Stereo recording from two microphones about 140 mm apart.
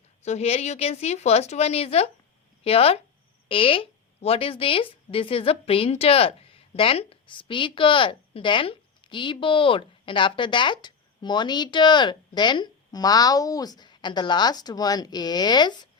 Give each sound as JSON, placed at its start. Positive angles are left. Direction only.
{"t": 0.2, "sound": "a woman's voice", "side_deg": 50}